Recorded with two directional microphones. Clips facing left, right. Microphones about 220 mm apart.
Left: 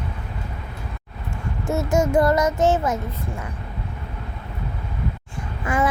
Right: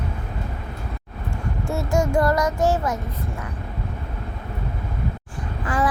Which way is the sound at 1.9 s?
20° left (ahead or behind).